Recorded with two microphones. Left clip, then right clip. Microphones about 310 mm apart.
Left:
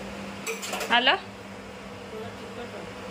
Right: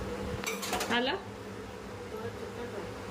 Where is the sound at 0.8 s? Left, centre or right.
Centre.